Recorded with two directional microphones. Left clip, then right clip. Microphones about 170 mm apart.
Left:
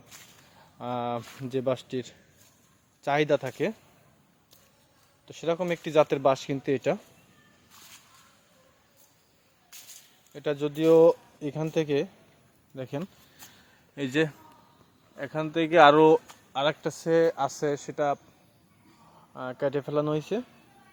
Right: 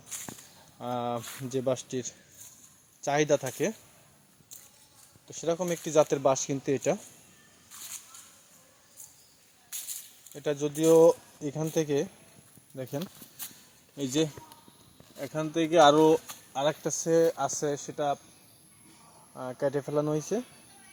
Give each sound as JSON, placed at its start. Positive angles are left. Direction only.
{"t": 0.8, "sound": "speech", "side_deg": 0}
{"t": 5.3, "sound": "speech", "side_deg": 10}
{"t": 10.3, "sound": "speech", "side_deg": 0}
{"t": 16.8, "sound": "speech", "side_deg": 30}
{"t": 17.2, "sound": "speech", "side_deg": 10}
{"t": 19.3, "sound": "speech", "side_deg": 5}
{"t": 20.0, "sound": "speech", "side_deg": 25}